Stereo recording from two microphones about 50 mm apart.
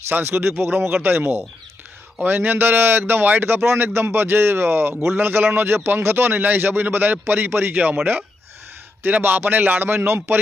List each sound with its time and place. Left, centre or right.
0.1 s a man's voice: right
9.0 s a man's voice: right